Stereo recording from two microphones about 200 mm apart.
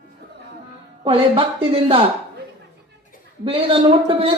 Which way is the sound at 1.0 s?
25° right (ahead or behind).